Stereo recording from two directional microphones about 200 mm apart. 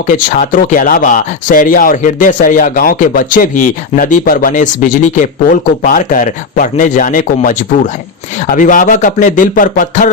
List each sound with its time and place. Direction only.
0.1 s speech: 40° left (ahead or behind)
8.5 s speech: 40° left (ahead or behind)